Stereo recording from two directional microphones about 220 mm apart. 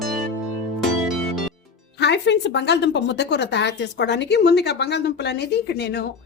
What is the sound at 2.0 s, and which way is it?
Speech, 50° left (ahead or behind).